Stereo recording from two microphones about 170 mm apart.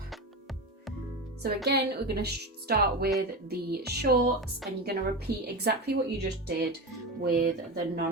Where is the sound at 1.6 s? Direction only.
70° right (ahead or behind).